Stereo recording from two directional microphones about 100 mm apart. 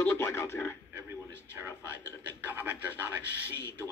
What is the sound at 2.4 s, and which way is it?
Speech, 15° right (ahead or behind).